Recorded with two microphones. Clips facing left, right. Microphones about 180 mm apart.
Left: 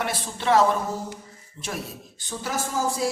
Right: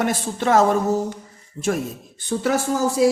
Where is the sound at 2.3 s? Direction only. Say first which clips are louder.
Right 9 dB; 65° right (ahead or behind).